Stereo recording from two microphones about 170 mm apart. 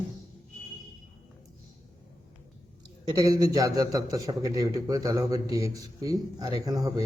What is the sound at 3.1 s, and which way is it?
Speech, 20° right (ahead or behind).